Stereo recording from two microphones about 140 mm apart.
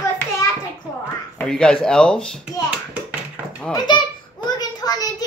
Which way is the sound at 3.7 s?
30° left (ahead or behind).